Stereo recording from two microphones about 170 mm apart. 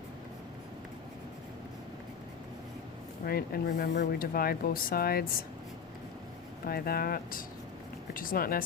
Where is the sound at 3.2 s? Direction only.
60° left (ahead or behind).